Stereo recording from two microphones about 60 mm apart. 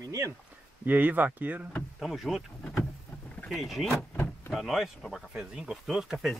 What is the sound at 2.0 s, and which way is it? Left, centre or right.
Speech, centre.